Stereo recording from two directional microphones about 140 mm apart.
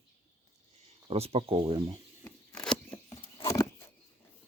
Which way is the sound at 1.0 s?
45° right (ahead or behind).